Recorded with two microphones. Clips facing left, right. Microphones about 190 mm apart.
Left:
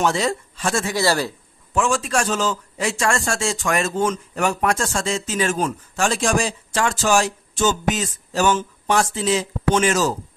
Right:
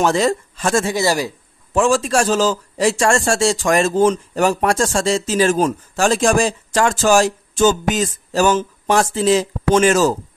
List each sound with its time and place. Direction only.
0.0 s speech: 45° right (ahead or behind)
0.8 s speech: 20° right (ahead or behind)
1.7 s a man's voice: 35° right (ahead or behind)